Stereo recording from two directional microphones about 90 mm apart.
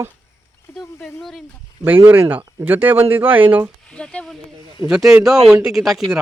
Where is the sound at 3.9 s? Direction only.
10° left (ahead or behind).